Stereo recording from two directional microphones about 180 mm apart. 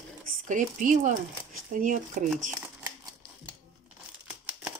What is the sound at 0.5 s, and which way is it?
Speech, 45° right (ahead or behind).